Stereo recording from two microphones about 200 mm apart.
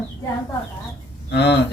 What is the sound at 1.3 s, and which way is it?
Speech, 60° left (ahead or behind).